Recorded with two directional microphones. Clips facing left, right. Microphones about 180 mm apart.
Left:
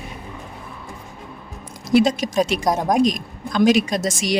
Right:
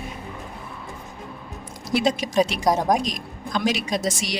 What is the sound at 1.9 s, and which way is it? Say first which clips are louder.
Speech: left 6 dB; 45° left (ahead or behind).